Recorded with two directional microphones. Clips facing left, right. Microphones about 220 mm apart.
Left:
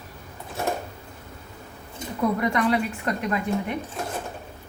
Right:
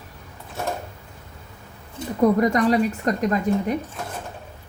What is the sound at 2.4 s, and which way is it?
Speech, 40° right (ahead or behind).